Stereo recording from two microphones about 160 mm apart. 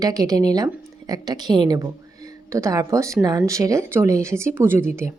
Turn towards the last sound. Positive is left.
turn(degrees=-15)  # may be behind; listen again after turning